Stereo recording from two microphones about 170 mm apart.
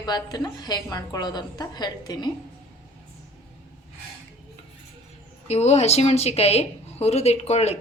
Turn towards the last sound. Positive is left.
turn(degrees=40)  # may be behind; listen again after turning